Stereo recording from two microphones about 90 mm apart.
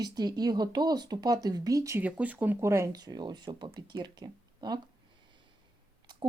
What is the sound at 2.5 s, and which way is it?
Speech, 30° right (ahead or behind).